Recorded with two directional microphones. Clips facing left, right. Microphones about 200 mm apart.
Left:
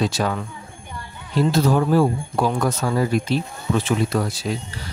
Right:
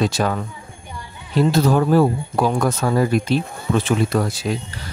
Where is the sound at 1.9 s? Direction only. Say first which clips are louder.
Right 2 dB; 55° right (ahead or behind).